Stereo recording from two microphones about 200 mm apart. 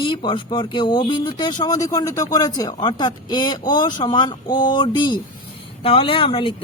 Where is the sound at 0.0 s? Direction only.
25° left (ahead or behind).